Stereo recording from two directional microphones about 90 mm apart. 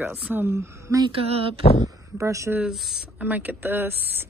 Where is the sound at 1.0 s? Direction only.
90° right.